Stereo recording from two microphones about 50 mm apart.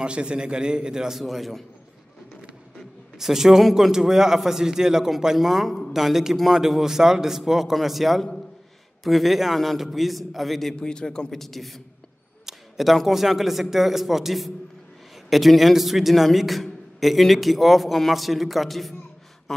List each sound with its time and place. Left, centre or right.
0.0 s a man's voice: centre
3.2 s a man's voice: centre
10.8 s a man's voice: centre